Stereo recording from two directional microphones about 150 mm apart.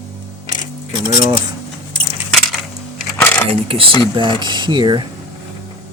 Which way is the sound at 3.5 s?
40° right (ahead or behind).